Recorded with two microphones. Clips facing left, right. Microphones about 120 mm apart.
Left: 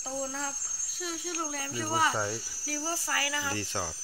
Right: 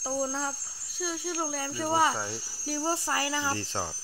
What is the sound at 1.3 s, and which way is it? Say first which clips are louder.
Speech: right 3 dB; 25° right (ahead or behind).